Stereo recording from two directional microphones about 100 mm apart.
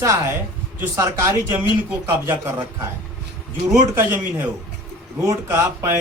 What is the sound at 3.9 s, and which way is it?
Speech, 20° right (ahead or behind).